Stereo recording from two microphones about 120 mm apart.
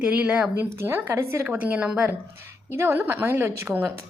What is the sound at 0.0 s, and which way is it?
A woman's voice, 10° right (ahead or behind).